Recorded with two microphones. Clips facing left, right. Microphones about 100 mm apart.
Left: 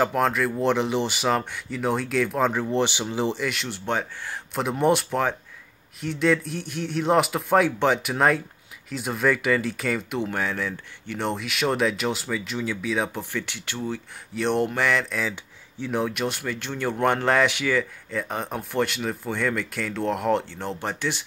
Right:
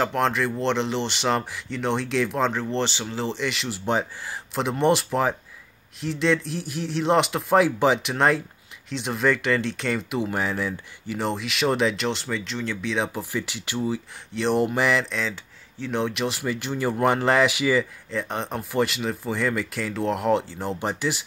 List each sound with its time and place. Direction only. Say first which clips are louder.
0.0 s speech: left 1 dB; 5° left (ahead or behind)
3.4 s speech: right 1 dB; centre (ahead or behind)
15.1 s speech: even; 10° left (ahead or behind); by 21.2 s 10° right (ahead or behind)